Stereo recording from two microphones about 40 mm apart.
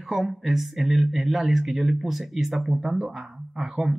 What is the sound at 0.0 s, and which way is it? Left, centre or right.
Speech, centre.